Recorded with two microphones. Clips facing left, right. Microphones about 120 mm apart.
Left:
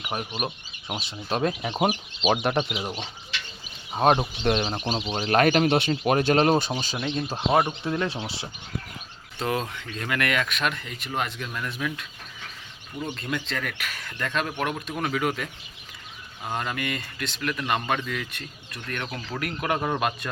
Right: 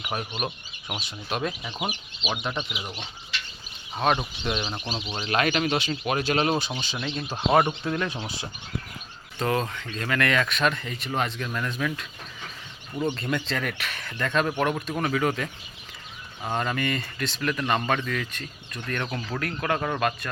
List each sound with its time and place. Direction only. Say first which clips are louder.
0.9 s speech: left 3 dB; 35° left (ahead or behind)
2.3 s speech: left 6 dB; 55° left (ahead or behind)
2.7 s speech: left 5 dB; 35° left (ahead or behind)
7.0 s speech: left 3 dB; 15° left (ahead or behind)
7.5 s speech: right 1 dB; 5° left (ahead or behind)
7.9 s speech: left 1 dB; 25° left (ahead or behind)
9.4 s speech: right 2 dB; 10° left (ahead or behind)
13.1 s speech: right 2 dB; centre (ahead or behind)
16.5 s speech: right 3 dB; 5° left (ahead or behind)